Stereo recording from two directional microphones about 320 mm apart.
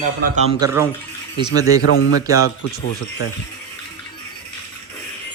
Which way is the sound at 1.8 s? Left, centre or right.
Left.